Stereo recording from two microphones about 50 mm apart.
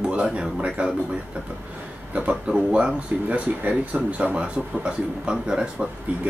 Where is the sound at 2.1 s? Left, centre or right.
Right.